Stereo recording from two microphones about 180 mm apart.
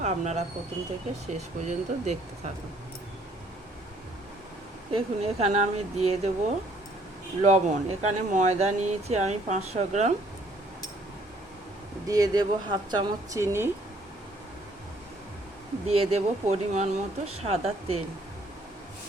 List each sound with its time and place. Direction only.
0.0 s speech: 40° right (ahead or behind)
4.9 s speech: 35° right (ahead or behind)
7.4 s speech: 40° right (ahead or behind)
12.0 s speech: 20° right (ahead or behind)
15.9 s speech: 35° right (ahead or behind)